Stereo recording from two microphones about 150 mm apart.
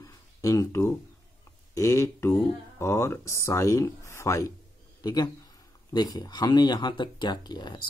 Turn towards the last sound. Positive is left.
turn(degrees=30)  # may be behind; listen again after turning